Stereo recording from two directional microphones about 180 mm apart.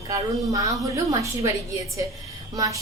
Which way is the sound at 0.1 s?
20° right (ahead or behind).